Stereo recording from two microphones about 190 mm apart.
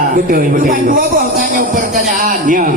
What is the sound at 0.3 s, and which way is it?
A man's voice, 50° right (ahead or behind).